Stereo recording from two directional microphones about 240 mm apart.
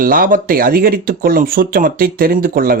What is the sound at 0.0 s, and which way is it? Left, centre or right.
Speech, right.